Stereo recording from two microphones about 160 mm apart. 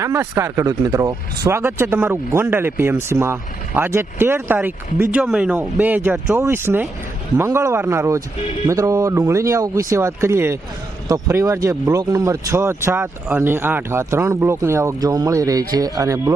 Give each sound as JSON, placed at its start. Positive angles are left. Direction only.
{"t": 0.0, "sound": "speech", "side_deg": -15}